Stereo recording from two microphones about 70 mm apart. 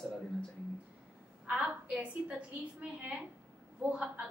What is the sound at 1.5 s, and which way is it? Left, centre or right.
A woman's voice, centre.